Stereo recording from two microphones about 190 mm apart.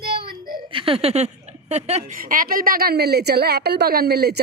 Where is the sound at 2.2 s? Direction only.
50° right (ahead or behind).